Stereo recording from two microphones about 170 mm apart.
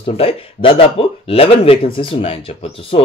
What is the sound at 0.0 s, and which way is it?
Speech, 35° left (ahead or behind).